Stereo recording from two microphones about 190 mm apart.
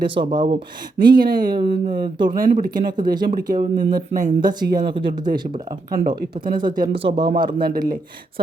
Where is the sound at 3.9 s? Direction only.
45° right (ahead or behind).